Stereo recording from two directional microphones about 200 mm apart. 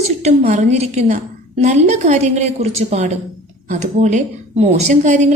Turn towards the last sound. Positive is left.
turn(degrees=-35)  # may be behind; listen again after turning